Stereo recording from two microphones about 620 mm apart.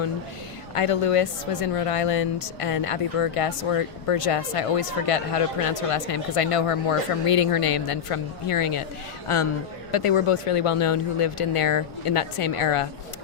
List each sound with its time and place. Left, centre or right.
0.7 s speech: left